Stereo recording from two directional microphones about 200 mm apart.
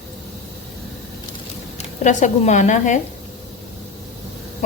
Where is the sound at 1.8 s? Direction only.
35° left (ahead or behind).